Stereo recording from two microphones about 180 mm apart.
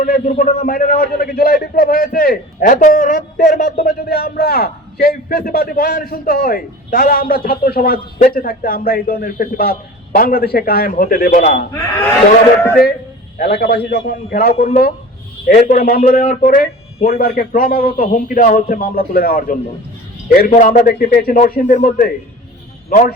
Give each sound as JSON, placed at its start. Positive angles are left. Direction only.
{"t": 0.0, "sound": "a man's voice", "side_deg": 50}
{"t": 3.8, "sound": "a man's voice", "side_deg": 60}
{"t": 12.7, "sound": "a man's voice", "side_deg": 55}